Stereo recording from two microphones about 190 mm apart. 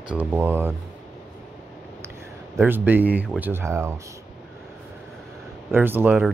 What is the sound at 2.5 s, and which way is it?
Speech, 10° right (ahead or behind).